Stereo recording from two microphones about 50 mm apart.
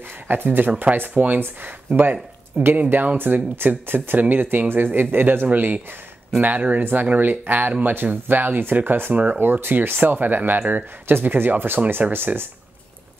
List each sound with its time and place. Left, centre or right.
0.3 s speech: right
9.1 s speech: right
9.4 s speech: right
9.9 s speech: right